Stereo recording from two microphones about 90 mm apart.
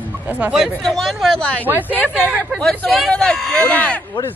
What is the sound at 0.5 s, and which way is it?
Speech, centre (ahead or behind).